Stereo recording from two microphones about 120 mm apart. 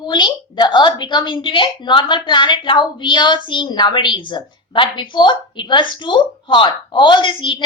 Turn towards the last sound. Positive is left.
turn(degrees=45)  # may be behind; listen again after turning